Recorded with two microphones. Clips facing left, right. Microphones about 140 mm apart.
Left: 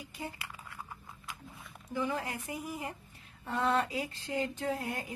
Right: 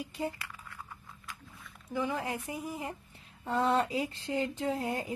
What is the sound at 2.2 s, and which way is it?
Speech, 20° right (ahead or behind).